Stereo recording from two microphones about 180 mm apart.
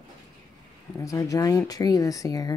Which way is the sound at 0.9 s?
20° left (ahead or behind).